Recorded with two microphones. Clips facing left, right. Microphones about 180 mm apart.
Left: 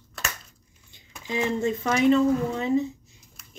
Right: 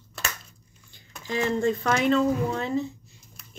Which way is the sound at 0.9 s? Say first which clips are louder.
Even; 20° left (ahead or behind).